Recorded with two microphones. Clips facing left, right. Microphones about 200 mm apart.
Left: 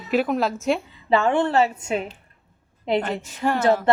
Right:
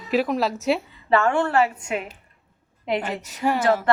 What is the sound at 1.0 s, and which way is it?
Speech, 20° left (ahead or behind).